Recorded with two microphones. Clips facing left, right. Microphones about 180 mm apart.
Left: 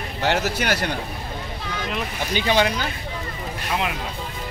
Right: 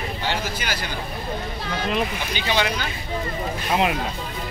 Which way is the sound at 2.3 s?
45° left (ahead or behind).